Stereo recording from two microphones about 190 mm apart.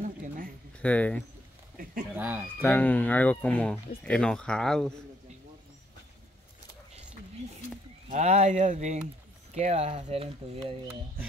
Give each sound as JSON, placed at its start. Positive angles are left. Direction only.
{"t": 0.7, "sound": "speech", "side_deg": 5}
{"t": 2.1, "sound": "speech", "side_deg": -10}
{"t": 2.6, "sound": "speech", "side_deg": 10}
{"t": 8.1, "sound": "speech", "side_deg": -35}